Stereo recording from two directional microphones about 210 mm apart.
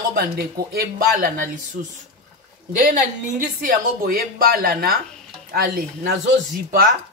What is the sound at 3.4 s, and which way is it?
Speech, 40° right (ahead or behind).